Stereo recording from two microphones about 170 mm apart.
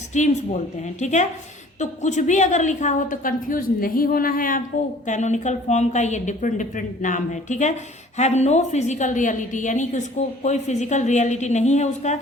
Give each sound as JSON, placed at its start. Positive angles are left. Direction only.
{"t": 0.1, "sound": "a woman's voice", "side_deg": 45}